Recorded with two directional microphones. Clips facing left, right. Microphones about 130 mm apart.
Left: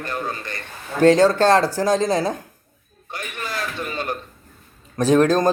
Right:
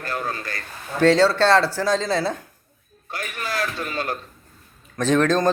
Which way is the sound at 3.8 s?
20° left (ahead or behind).